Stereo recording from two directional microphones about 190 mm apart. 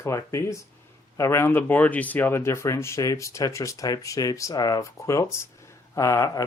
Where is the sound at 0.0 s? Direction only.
15° left (ahead or behind).